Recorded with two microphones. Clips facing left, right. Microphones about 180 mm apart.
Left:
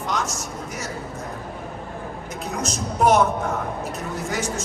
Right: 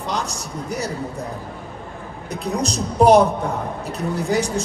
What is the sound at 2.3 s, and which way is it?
A man's voice, 35° right (ahead or behind).